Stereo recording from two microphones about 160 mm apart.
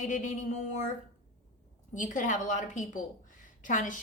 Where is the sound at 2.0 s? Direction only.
55° left (ahead or behind).